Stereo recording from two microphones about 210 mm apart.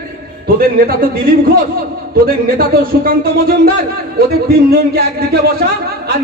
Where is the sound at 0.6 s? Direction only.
45° right (ahead or behind).